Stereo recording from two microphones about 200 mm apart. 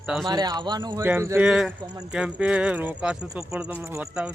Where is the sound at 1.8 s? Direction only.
20° right (ahead or behind).